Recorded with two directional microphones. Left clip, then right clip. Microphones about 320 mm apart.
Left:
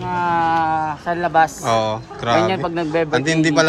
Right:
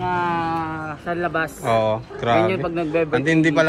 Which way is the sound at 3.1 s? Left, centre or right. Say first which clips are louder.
Left 1 dB; centre.